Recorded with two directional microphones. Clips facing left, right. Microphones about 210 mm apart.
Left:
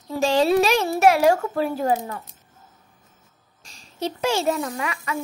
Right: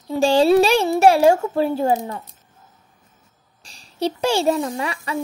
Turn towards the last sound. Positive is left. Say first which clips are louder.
# right 3 dB
turn(degrees=-30)  # may be behind; listen again after turning